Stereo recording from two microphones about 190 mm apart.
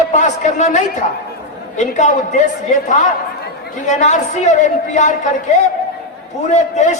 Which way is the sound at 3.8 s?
40° left (ahead or behind).